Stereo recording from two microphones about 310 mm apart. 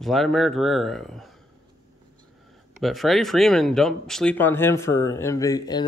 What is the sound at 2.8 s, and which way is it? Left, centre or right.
Speech, centre.